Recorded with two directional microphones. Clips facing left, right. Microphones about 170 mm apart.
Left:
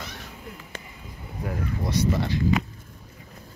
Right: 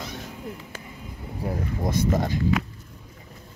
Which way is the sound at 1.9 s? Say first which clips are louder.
Right 1 dB; 45° right (ahead or behind).